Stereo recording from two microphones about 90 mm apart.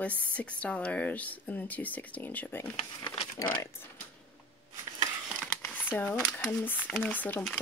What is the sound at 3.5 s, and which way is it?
Speech, 25° left (ahead or behind).